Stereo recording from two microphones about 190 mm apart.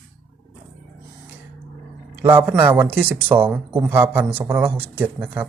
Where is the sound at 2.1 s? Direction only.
10° right (ahead or behind).